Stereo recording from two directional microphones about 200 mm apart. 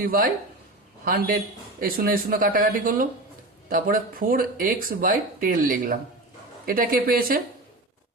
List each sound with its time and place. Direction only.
0.0 s speech: 45° right (ahead or behind)